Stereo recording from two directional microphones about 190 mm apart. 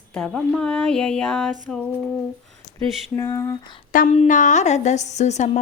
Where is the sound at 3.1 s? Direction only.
15° left (ahead or behind).